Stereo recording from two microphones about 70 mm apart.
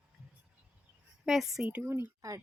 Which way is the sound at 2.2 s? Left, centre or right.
Right.